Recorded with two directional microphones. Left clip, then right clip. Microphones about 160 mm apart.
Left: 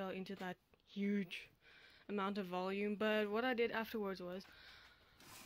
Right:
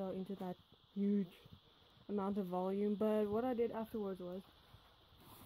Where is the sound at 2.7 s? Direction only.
10° right (ahead or behind).